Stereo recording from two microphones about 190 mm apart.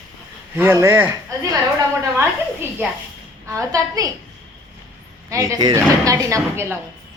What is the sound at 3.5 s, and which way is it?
Speech, 15° right (ahead or behind).